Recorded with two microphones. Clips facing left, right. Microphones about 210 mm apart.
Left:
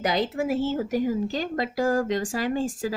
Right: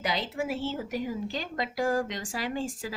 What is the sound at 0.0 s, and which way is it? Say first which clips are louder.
Speech: left 6 dB; 45° left (ahead or behind).